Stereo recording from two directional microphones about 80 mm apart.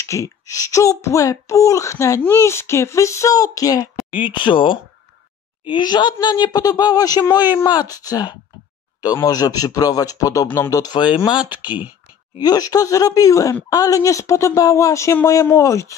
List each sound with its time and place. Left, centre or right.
0.0 s speech: left
4.1 s speech: left
5.7 s a woman's voice: left
10.7 s speech: left
12.4 s speech: left